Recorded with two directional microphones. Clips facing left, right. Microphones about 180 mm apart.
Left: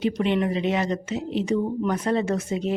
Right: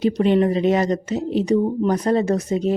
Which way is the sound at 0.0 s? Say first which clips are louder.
Right 6 dB; 40° right (ahead or behind).